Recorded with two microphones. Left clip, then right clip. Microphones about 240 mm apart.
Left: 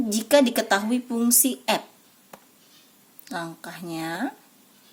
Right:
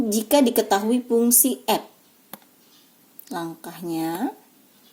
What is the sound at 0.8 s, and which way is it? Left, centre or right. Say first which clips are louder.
Speech: right 4 dB; left.